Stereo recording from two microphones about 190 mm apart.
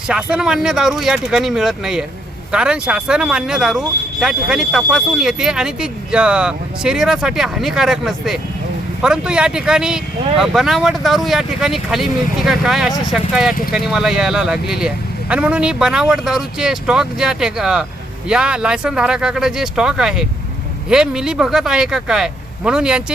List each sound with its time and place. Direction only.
0.1 s speech: 5° right (ahead or behind)